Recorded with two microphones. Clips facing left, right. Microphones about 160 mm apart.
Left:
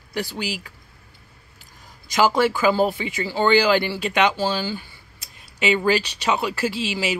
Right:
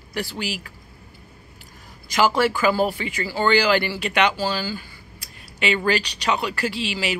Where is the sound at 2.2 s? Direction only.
15° left (ahead or behind).